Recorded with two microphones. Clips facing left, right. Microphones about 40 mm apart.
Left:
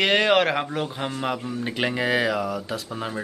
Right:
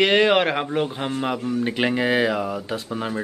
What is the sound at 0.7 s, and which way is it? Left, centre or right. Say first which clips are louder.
Speech: right 4 dB; centre.